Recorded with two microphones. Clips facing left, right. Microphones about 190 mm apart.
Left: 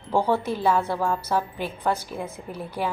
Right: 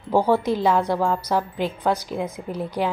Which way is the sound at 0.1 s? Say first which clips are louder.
Right 4 dB; 15° right (ahead or behind).